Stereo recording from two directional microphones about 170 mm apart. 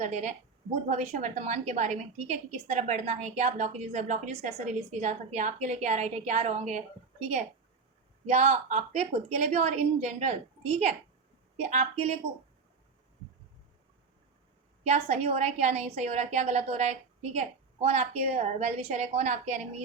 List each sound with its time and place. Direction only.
0.0 s a woman's voice: 45° right (ahead or behind)
14.8 s a woman's voice: 40° right (ahead or behind)